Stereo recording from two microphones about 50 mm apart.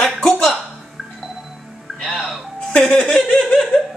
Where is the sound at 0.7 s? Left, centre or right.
Centre.